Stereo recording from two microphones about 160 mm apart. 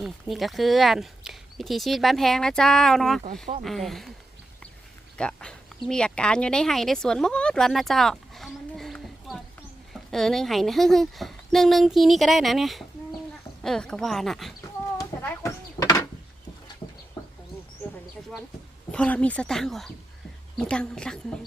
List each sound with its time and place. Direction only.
0.0 s speech: centre (ahead or behind)
5.1 s speech: 5° left (ahead or behind)
14.9 s a sound: 20° left (ahead or behind)
18.9 s speech: 5° left (ahead or behind)